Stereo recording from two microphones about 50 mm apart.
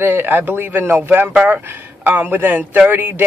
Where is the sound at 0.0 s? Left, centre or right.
Right.